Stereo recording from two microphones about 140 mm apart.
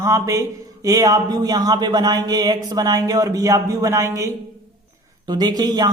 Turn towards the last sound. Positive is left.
turn(degrees=-30)  # may be behind; listen again after turning